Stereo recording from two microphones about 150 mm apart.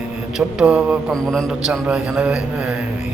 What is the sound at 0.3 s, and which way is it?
Mantra, 10° right (ahead or behind).